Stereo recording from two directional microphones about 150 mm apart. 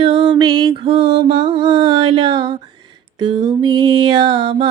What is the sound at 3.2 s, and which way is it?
Mantra, 30° right (ahead or behind).